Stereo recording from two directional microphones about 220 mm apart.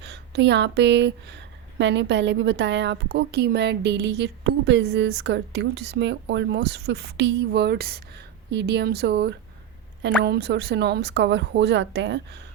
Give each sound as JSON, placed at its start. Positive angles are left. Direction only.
{"t": 0.0, "sound": "a woman's voice", "side_deg": -50}